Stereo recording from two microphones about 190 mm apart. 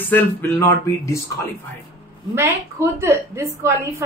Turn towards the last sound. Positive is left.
turn(degrees=-15)  # may be behind; listen again after turning